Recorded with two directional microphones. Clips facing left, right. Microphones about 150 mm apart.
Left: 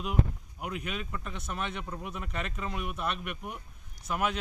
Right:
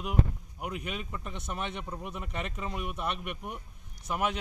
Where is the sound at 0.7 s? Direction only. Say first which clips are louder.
Even; 15° right (ahead or behind).